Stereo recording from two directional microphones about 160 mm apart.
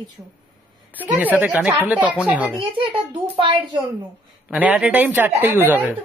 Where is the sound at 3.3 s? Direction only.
30° right (ahead or behind).